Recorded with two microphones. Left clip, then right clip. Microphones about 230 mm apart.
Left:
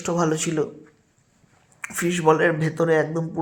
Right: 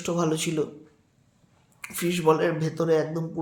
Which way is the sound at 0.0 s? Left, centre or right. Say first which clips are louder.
Left 3 dB; centre.